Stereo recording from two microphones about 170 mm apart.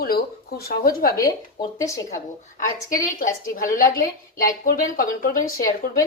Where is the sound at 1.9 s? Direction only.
20° left (ahead or behind).